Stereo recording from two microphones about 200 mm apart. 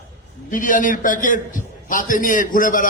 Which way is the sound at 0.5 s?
40° left (ahead or behind).